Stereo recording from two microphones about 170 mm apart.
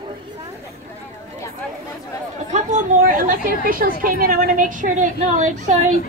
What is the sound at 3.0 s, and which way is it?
A woman's voice, 55° right (ahead or behind).